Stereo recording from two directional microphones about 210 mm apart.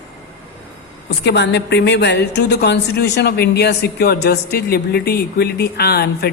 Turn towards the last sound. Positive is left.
turn(degrees=50)  # may be behind; listen again after turning